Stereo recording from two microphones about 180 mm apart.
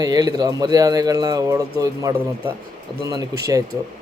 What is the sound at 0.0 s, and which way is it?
A man's voice, 20° right (ahead or behind).